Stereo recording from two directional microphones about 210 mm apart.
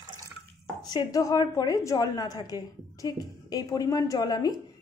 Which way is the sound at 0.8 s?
20° left (ahead or behind).